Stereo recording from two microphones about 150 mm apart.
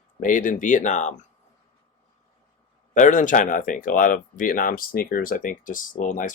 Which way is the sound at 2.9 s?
60° left (ahead or behind).